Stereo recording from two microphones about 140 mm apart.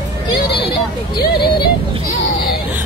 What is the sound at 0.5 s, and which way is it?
Hubbub, 35° left (ahead or behind).